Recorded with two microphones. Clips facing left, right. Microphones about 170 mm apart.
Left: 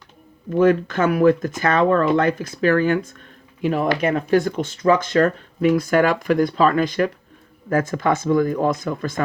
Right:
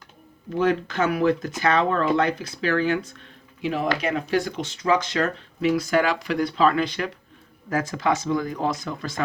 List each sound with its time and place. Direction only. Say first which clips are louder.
0.5 s speech: left 6 dB; 50° left (ahead or behind)